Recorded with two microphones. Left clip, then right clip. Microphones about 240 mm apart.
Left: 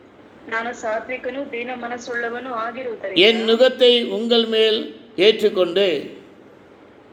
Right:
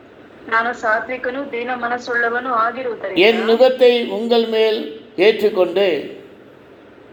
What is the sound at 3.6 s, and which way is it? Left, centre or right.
A man's voice, centre.